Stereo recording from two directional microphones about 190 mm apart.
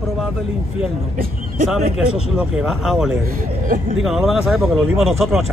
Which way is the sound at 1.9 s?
5° right (ahead or behind).